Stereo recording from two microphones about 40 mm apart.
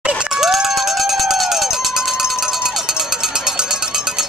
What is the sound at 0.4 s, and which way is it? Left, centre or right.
Crowd, centre.